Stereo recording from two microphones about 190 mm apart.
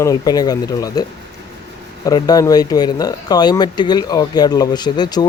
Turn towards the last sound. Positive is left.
turn(degrees=20)  # may be behind; listen again after turning